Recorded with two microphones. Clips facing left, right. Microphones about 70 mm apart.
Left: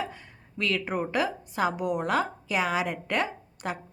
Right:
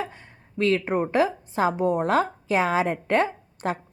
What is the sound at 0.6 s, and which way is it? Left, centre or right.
A woman's voice, right.